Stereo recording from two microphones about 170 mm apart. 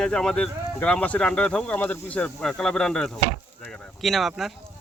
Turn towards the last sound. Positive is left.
turn(degrees=0)  # may be behind; listen again after turning